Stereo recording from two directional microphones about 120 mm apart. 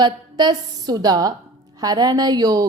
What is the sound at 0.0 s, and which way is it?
A woman's voice, 35° right (ahead or behind).